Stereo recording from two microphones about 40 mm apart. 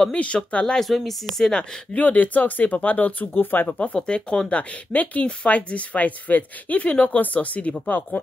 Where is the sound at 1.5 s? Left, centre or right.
Left.